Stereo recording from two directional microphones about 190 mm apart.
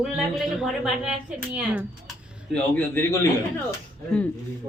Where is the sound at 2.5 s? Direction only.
5° left (ahead or behind).